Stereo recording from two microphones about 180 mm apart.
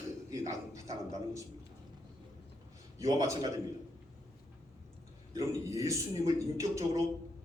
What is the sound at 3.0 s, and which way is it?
Speech, 20° right (ahead or behind).